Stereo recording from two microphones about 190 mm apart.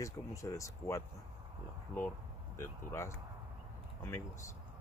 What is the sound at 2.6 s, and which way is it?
Speech, 15° left (ahead or behind).